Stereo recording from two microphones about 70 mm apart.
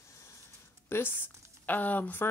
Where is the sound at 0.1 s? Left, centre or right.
Left.